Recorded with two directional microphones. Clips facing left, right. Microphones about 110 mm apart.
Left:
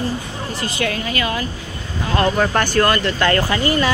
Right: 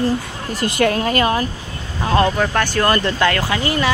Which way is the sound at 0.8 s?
45° right (ahead or behind).